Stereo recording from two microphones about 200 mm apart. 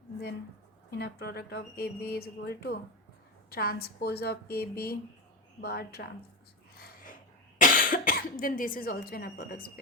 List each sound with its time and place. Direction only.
0.9 s speech: 55° left (ahead or behind)
6.7 s a sound: 45° left (ahead or behind)
7.6 s speech: 45° left (ahead or behind)